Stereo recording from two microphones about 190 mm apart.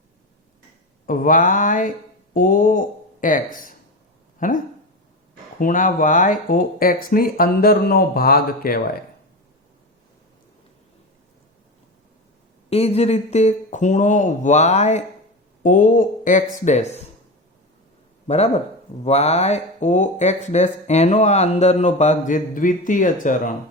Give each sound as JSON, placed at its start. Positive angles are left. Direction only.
{"t": 1.0, "sound": "speech", "side_deg": 45}
{"t": 12.7, "sound": "speech", "side_deg": 35}
{"t": 18.3, "sound": "speech", "side_deg": 35}